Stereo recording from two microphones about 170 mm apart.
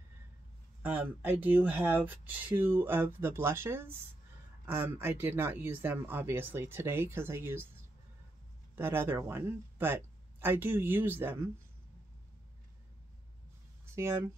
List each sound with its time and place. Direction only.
0.8 s speech: 10° right (ahead or behind)
8.7 s speech: 15° right (ahead or behind)
13.9 s speech: 15° right (ahead or behind)